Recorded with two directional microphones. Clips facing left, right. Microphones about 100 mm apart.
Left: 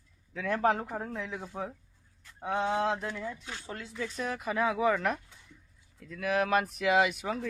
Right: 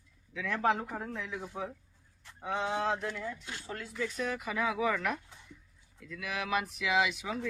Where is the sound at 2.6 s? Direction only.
25° left (ahead or behind).